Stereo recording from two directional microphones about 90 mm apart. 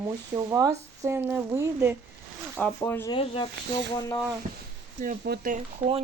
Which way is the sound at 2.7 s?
30° left (ahead or behind).